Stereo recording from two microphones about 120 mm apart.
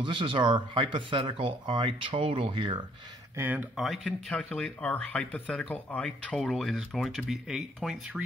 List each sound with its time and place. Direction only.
0.0 s speech: 45° right (ahead or behind)
3.3 s speech: 15° right (ahead or behind)
3.7 s speech: centre (ahead or behind)